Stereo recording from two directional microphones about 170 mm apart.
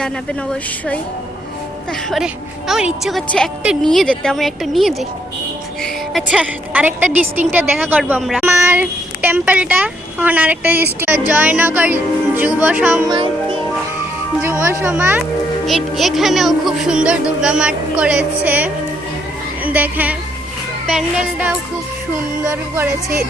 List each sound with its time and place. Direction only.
1.9 s music: centre (ahead or behind)
5.8 s a woman's voice: centre (ahead or behind)
13.1 s speech: 30° right (ahead or behind)
14.4 s a woman's voice: 15° right (ahead or behind)
15.6 s music: centre (ahead or behind)
19.6 s a woman's voice: 10° right (ahead or behind)
20.8 s music: 5° right (ahead or behind)
22.4 s a woman's voice: 15° right (ahead or behind)